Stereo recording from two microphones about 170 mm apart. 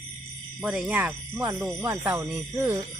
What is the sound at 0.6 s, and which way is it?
Speech, 5° right (ahead or behind).